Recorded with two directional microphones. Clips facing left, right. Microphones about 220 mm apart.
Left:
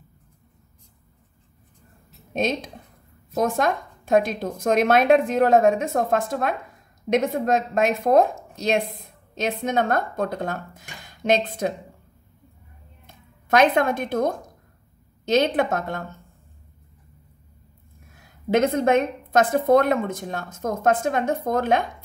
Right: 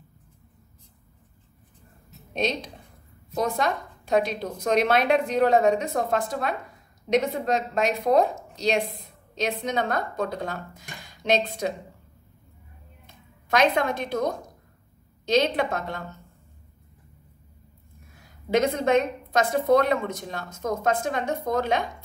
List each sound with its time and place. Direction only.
2.3 s a woman's voice: 50° left (ahead or behind)
13.0 s a woman's voice: 50° left (ahead or behind)
18.5 s a woman's voice: 50° left (ahead or behind)